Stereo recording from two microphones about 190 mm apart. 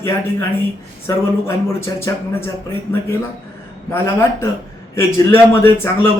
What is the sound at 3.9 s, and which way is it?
Speech, 10° left (ahead or behind).